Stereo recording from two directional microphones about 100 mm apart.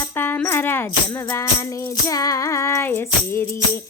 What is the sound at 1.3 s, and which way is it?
Music, 30° left (ahead or behind).